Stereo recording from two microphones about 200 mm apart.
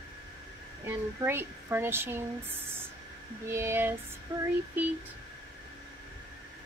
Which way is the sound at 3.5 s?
10° right (ahead or behind).